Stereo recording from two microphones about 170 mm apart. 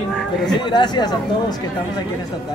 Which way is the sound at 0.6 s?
25° left (ahead or behind).